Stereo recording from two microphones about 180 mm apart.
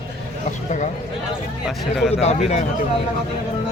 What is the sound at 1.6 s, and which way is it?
Speech, centre (ahead or behind).